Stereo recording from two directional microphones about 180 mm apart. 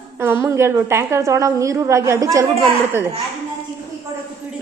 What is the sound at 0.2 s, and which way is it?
A woman's voice, 15° right (ahead or behind).